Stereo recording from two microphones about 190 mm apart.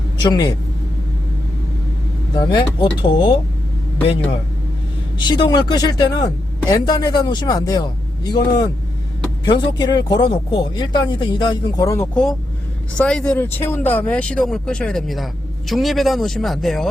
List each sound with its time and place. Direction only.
0.2 s speech: 20° left (ahead or behind)
2.3 s speech: 25° left (ahead or behind)
5.2 s speech: 20° left (ahead or behind)
12.1 s speech: centre (ahead or behind)